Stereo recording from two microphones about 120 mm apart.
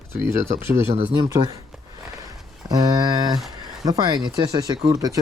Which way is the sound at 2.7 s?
35° right (ahead or behind).